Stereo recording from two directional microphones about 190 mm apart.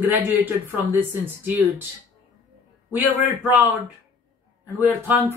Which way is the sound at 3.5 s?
10° right (ahead or behind).